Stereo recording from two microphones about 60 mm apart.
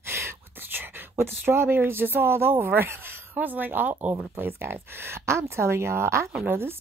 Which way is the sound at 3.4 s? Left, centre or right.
Right.